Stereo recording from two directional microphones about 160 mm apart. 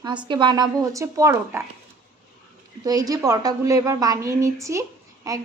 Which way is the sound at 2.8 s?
25° right (ahead or behind).